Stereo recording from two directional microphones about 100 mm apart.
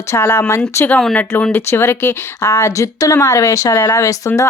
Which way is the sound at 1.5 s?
25° left (ahead or behind).